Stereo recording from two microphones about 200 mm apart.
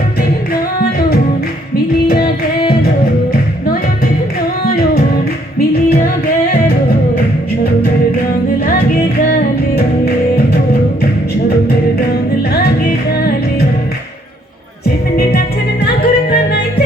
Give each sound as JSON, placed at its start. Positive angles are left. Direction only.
{"t": 2.0, "sound": "music", "side_deg": 50}
{"t": 5.5, "sound": "music", "side_deg": 50}
{"t": 9.7, "sound": "music", "side_deg": 50}
{"t": 15.2, "sound": "music", "side_deg": 50}